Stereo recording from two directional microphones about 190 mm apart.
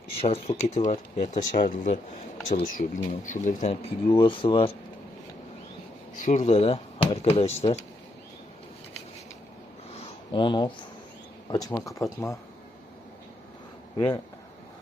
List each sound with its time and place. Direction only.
0.2 s speech: 30° left (ahead or behind)
6.1 s speech: 40° left (ahead or behind)
10.3 s speech: 25° left (ahead or behind)
13.9 s speech: 20° left (ahead or behind)